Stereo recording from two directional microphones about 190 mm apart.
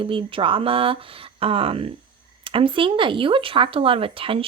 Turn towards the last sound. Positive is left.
turn(degrees=-30)  # may be behind; listen again after turning